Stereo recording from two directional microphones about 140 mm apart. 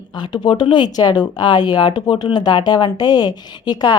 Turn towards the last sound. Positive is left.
turn(degrees=30)  # may be behind; listen again after turning